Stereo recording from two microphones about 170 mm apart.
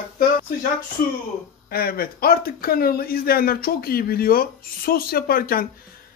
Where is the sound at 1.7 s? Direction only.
65° left (ahead or behind).